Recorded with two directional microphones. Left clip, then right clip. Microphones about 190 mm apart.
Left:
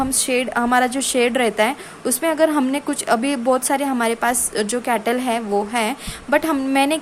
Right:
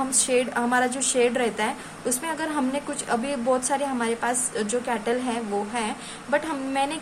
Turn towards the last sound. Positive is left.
turn(degrees=45)  # may be behind; listen again after turning